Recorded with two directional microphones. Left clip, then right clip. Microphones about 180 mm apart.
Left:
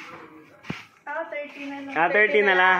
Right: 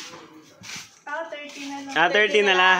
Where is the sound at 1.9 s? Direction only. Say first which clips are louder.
Right 1 dB; 20° right (ahead or behind).